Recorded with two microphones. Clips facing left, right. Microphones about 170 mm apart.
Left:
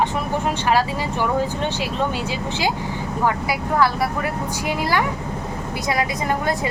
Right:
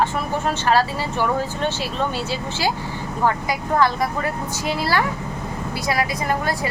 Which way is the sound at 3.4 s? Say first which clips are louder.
Even; 10° left (ahead or behind).